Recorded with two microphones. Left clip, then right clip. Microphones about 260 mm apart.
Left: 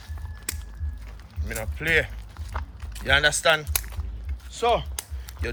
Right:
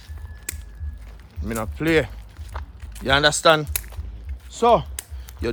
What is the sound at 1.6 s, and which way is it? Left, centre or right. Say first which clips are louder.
Speech: right 3 dB; centre.